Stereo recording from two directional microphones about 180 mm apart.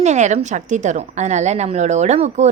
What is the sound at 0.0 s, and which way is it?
A woman's voice, 40° right (ahead or behind).